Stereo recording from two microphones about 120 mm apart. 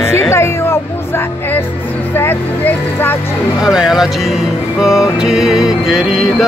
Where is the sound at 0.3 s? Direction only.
20° left (ahead or behind).